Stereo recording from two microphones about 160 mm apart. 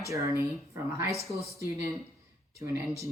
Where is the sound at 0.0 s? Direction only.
20° right (ahead or behind).